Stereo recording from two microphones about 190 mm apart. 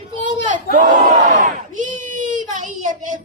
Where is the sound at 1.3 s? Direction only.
40° right (ahead or behind).